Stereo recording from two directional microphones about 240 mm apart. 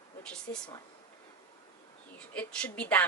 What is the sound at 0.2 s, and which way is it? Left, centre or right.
Speech, centre.